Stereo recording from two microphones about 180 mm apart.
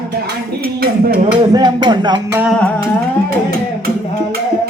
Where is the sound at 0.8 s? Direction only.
55° right (ahead or behind).